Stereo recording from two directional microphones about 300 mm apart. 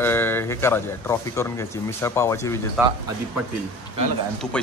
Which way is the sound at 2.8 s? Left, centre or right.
Centre.